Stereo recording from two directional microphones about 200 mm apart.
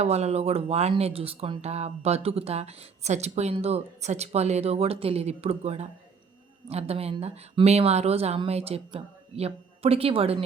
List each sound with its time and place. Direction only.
0.0 s speech: 35° right (ahead or behind)